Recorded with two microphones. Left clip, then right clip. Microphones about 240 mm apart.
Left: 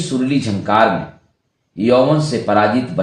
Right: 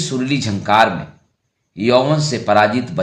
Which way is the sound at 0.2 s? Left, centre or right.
Right.